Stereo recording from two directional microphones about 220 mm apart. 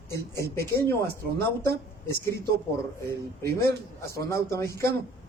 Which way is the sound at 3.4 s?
10° left (ahead or behind).